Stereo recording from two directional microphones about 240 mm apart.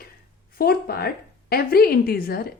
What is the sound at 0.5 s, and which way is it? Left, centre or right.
A woman's voice, left.